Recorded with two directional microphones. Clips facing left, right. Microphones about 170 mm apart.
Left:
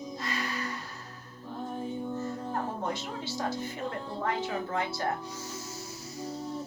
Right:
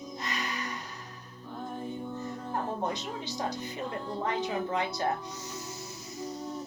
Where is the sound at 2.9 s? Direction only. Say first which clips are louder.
Left 1 dB; 20° right (ahead or behind).